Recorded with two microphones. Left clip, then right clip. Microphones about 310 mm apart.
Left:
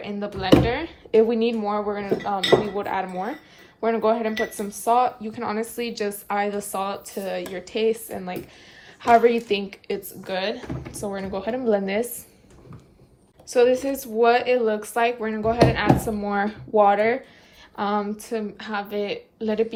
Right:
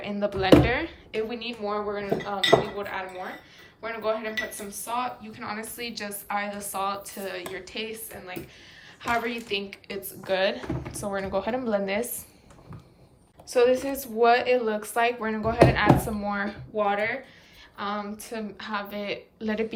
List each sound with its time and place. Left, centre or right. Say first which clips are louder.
0.0 s speech: right 2 dB; centre
1.3 s speech: left 8 dB; centre
13.5 s speech: left 3 dB; centre